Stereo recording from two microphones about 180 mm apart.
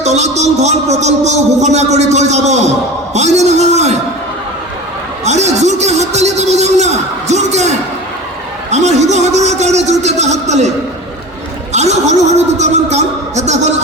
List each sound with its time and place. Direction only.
0.0 s a man's voice: 40° right (ahead or behind)
5.2 s a man's voice: 40° right (ahead or behind)
8.7 s a man's voice: 40° right (ahead or behind)
11.7 s a man's voice: 40° right (ahead or behind)